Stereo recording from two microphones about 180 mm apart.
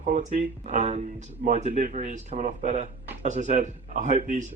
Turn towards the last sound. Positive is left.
turn(degrees=-45)  # may be behind; listen again after turning